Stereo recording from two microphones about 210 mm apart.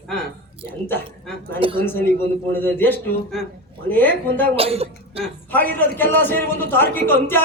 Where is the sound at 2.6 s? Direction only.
10° left (ahead or behind).